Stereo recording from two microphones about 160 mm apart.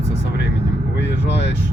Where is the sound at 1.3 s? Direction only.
90° left.